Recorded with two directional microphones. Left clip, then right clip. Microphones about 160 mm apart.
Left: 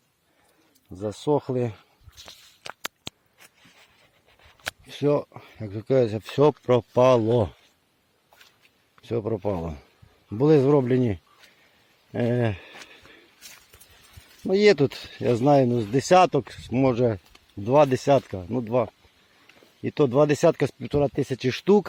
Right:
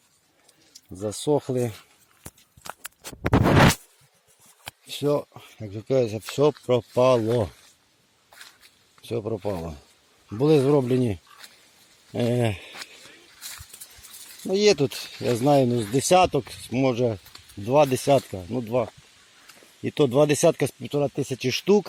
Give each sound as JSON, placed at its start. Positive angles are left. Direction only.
{"t": 1.0, "sound": "speech", "side_deg": 0}
{"t": 4.9, "sound": "speech", "side_deg": 25}
{"t": 5.3, "sound": "speech", "side_deg": 10}
{"t": 9.0, "sound": "speech", "side_deg": 15}
{"t": 14.4, "sound": "speech", "side_deg": 20}
{"t": 15.4, "sound": "speech", "side_deg": 10}
{"t": 17.8, "sound": "speech", "side_deg": 5}
{"t": 19.8, "sound": "speech", "side_deg": 0}
{"t": 20.8, "sound": "speech", "side_deg": 20}